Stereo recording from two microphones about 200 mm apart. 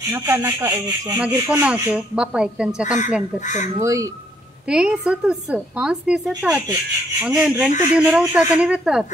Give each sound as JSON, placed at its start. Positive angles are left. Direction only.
{"t": 0.1, "sound": "a woman's voice", "side_deg": -15}
{"t": 2.8, "sound": "speech", "side_deg": 35}
{"t": 3.7, "sound": "speech", "side_deg": -15}
{"t": 4.6, "sound": "a woman's voice", "side_deg": -5}